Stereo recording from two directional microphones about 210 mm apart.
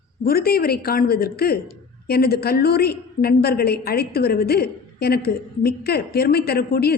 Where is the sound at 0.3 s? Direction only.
45° left (ahead or behind).